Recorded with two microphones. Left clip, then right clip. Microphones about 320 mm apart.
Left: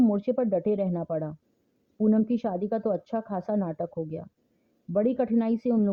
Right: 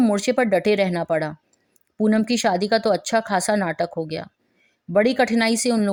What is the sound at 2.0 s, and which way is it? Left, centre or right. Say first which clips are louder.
Speech: right 7 dB; right.